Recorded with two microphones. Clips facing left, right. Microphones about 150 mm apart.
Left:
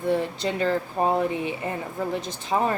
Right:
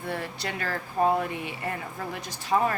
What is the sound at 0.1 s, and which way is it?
A woman's voice, 20° left (ahead or behind).